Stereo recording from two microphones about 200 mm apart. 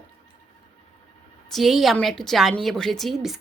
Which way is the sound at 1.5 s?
Centre (ahead or behind).